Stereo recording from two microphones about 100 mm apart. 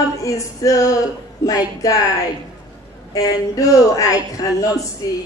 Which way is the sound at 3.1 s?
35° left (ahead or behind).